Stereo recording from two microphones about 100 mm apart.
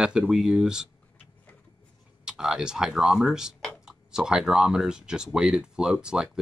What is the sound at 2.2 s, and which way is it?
Speech, 10° right (ahead or behind).